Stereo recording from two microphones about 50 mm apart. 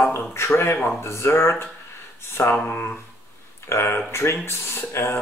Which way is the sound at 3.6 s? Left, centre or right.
Left.